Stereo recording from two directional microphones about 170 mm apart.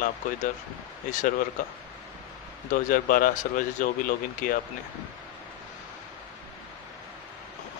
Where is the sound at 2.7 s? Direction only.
55° left (ahead or behind).